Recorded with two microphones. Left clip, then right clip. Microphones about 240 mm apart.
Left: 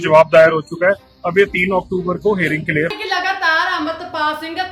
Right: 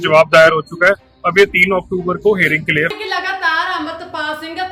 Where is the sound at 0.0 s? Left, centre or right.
Centre.